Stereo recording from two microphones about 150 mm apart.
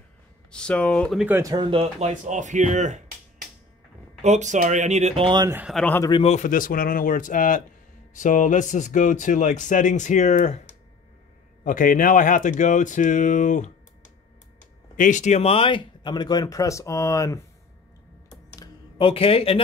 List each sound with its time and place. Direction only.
0.5 s speech: 5° left (ahead or behind)
1.1 s speech: 10° right (ahead or behind)
1.4 s speech: 25° right (ahead or behind)
2.0 s speech: 55° right (ahead or behind)
4.2 s speech: 50° right (ahead or behind)
5.7 s a man's voice: 5° left (ahead or behind)
6.2 s speech: 55° left (ahead or behind)
11.6 s speech: 65° left (ahead or behind)
15.0 s speech: 55° left (ahead or behind); by 17.4 s 20° left (ahead or behind)
18.9 s speech: 35° left (ahead or behind)